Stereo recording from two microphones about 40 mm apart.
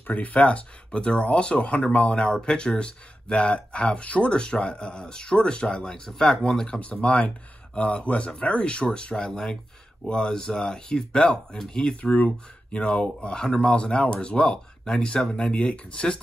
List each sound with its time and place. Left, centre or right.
0.0 s speech: left
0.4 s speech: left
6.8 s speech: left; by 11.9 s centre
12.0 s speech: left
14.5 s speech: centre